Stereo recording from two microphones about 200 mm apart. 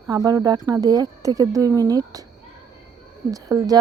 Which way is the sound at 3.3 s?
15° right (ahead or behind).